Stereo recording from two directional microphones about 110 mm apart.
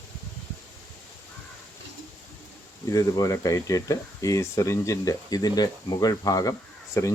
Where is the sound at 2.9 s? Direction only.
30° left (ahead or behind).